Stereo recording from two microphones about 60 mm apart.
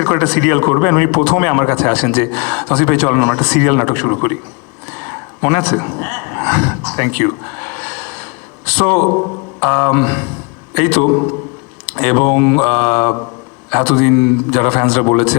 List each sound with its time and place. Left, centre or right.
0.0 s speech: left
1.4 s speech: left
1.7 s speech: centre
4.9 s a sound: left
8.6 s speech: centre
9.0 s a man's voice: left
9.6 s speech: left